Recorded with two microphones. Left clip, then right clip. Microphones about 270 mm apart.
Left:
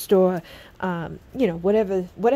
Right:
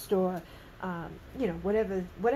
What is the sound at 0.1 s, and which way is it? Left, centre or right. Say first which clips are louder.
Speech: left 11 dB; left.